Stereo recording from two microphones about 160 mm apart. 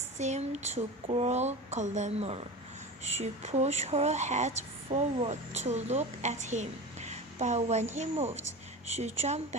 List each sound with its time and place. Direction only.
0.2 s speech: 45° right (ahead or behind)